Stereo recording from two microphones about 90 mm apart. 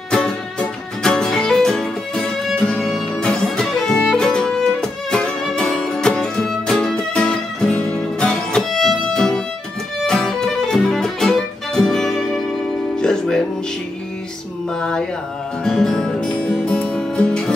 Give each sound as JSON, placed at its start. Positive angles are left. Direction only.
{"t": 0.1, "sound": "music", "side_deg": 10}
{"t": 14.8, "sound": "mantra", "side_deg": 10}
{"t": 15.6, "sound": "music", "side_deg": 5}